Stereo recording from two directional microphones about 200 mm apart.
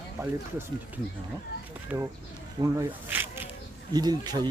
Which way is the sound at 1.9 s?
10° right (ahead or behind).